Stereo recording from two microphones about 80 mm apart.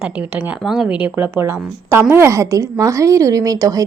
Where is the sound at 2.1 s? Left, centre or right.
Right.